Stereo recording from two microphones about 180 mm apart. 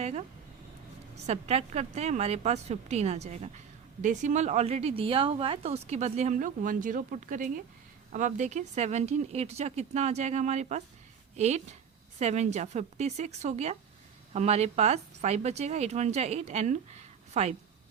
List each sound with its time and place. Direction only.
0.0 s speech: 35° right (ahead or behind)
1.3 s a woman's voice: 35° right (ahead or behind)